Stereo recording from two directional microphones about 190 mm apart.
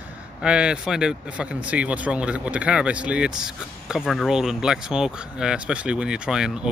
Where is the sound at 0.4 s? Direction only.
5° right (ahead or behind).